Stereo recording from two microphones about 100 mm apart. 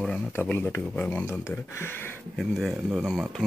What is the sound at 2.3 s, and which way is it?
Speech, centre (ahead or behind).